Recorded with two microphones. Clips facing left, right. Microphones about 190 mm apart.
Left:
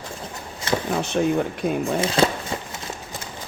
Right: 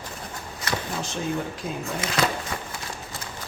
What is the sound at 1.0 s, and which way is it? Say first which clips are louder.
Speech: left 7 dB; 60° left (ahead or behind).